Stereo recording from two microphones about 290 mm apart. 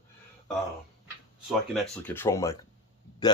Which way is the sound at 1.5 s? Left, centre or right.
Centre.